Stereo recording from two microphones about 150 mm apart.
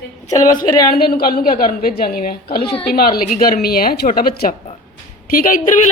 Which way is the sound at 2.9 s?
85° left.